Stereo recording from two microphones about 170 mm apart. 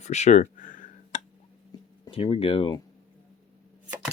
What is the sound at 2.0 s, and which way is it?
Speech, 30° left (ahead or behind).